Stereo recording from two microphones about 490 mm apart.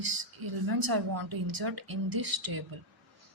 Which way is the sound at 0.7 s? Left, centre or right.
Right.